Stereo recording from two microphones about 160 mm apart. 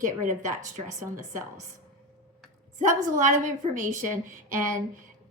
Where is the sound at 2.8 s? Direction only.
55° right (ahead or behind).